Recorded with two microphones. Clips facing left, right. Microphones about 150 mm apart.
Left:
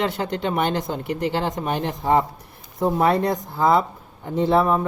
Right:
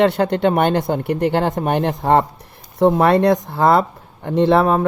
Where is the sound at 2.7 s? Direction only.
75° right (ahead or behind).